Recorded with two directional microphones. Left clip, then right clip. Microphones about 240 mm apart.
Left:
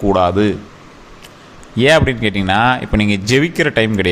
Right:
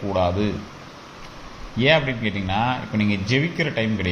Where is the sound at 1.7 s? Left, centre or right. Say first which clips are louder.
Left 7 dB; left.